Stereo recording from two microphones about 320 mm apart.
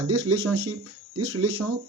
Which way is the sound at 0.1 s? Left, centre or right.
Right.